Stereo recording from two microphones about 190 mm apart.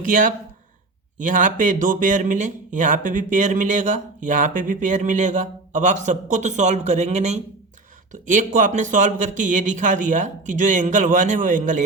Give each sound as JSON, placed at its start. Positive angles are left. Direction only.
{"t": 0.1, "sound": "speech", "side_deg": -45}